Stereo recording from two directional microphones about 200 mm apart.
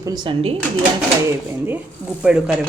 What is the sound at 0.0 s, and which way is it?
Speech, 20° right (ahead or behind).